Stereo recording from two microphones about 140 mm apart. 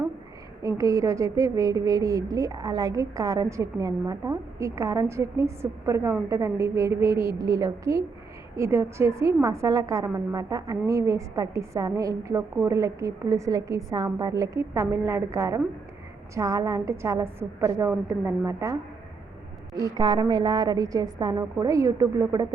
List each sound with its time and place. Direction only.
0.6 s a woman's voice: 25° right (ahead or behind)